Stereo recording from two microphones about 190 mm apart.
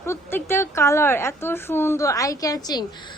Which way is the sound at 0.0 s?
15° left (ahead or behind).